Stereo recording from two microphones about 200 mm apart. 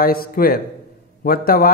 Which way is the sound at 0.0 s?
45° left (ahead or behind).